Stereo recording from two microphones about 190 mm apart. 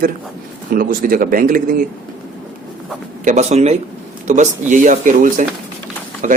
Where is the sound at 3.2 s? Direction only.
35° right (ahead or behind).